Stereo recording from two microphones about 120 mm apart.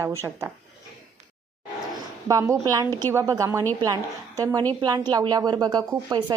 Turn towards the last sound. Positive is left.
turn(degrees=-30)  # may be behind; listen again after turning